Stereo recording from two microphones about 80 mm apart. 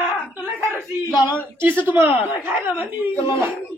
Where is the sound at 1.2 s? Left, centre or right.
Right.